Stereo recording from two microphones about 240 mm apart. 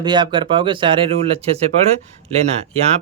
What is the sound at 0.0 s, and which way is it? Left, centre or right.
Speech, centre.